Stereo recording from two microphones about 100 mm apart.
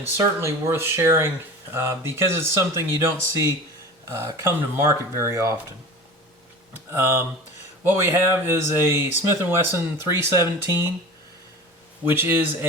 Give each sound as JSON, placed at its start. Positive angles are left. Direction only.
{"t": 0.2, "sound": "speech", "side_deg": -30}
{"t": 7.0, "sound": "speech", "side_deg": -25}
{"t": 12.0, "sound": "speech", "side_deg": -20}